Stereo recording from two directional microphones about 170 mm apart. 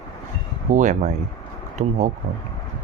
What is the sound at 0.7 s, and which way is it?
Speech, 45° right (ahead or behind).